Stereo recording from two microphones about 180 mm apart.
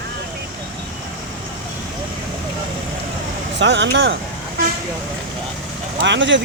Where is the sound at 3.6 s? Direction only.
75° right (ahead or behind).